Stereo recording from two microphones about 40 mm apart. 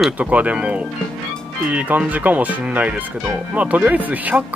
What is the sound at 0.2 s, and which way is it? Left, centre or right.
Speech, right.